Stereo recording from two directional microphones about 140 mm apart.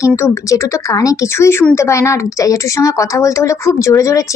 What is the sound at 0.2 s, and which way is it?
A woman's voice, 20° left (ahead or behind).